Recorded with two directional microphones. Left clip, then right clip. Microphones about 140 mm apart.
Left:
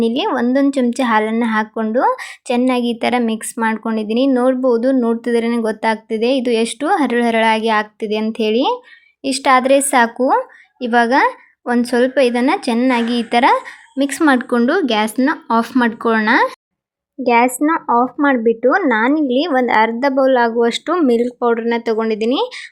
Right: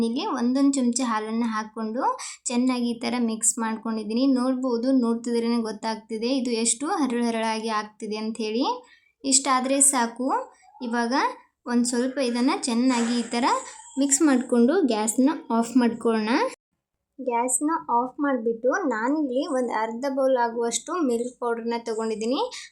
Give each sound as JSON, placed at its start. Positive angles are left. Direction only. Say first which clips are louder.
{"t": 0.0, "sound": "speech", "louder": "left 10 dB", "side_deg": 35}